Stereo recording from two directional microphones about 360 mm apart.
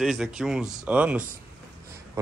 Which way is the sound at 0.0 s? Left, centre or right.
Centre.